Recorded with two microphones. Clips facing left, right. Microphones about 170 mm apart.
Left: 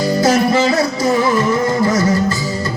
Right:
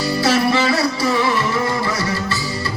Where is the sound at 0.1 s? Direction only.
45° left (ahead or behind).